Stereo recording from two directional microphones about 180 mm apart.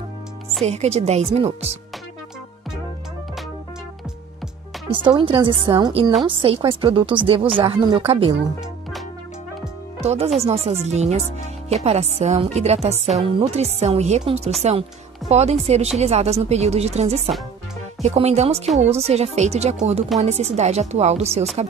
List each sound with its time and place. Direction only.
0.7 s speech: 35° right (ahead or behind)
4.9 s a woman's voice: 25° right (ahead or behind)
9.9 s speech: 35° right (ahead or behind)